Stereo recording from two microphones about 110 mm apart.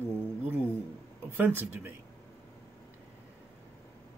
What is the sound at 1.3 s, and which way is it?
Speech, 20° right (ahead or behind).